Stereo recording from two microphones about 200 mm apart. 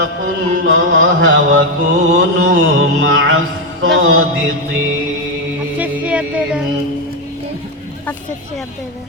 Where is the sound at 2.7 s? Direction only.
65° right (ahead or behind).